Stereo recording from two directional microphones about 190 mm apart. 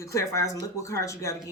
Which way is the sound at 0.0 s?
15° left (ahead or behind).